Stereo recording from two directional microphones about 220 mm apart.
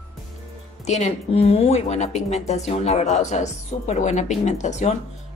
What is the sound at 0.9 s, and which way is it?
A woman's voice, 30° left (ahead or behind).